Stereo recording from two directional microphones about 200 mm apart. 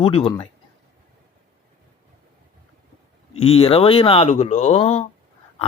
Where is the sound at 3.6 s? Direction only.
30° left (ahead or behind).